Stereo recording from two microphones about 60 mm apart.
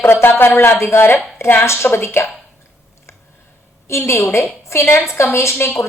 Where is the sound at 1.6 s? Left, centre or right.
Left.